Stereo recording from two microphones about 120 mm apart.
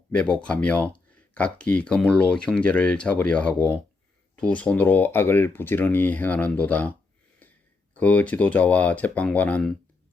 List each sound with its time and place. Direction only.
0.2 s speech: 10° left (ahead or behind)
7.9 s speech: 10° left (ahead or behind)